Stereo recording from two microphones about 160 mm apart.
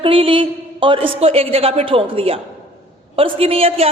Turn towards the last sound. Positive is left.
turn(degrees=-40)  # may be behind; listen again after turning